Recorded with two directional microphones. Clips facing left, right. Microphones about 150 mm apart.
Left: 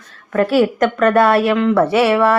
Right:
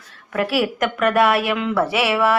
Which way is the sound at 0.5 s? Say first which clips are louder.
Left 7 dB; 30° left (ahead or behind).